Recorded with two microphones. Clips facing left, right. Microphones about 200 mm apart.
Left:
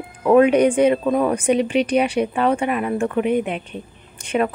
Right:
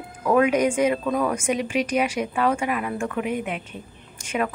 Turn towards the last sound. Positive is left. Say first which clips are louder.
# left 5 dB
turn(degrees=35)  # may be behind; listen again after turning